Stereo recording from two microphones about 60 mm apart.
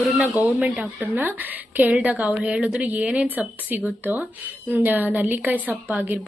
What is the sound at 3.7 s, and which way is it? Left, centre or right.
A woman's voice, right.